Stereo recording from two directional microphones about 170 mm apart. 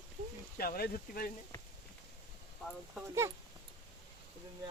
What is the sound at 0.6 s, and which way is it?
Speech, 60° left (ahead or behind).